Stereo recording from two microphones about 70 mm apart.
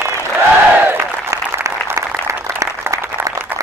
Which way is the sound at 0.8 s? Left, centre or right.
Right.